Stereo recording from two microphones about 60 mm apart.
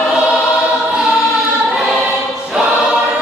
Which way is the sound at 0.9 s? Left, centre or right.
Centre.